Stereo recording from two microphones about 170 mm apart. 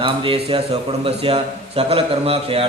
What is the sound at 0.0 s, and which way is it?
A man's voice, 35° right (ahead or behind).